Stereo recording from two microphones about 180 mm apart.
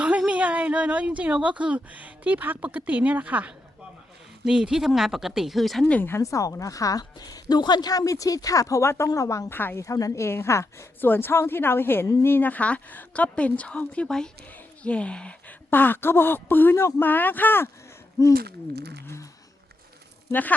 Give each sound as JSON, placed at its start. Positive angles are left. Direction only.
{"t": 0.0, "sound": "speech", "side_deg": -5}
{"t": 5.8, "sound": "a woman's voice", "side_deg": 10}
{"t": 18.3, "sound": "speech", "side_deg": -60}
{"t": 19.0, "sound": "a woman's voice", "side_deg": 15}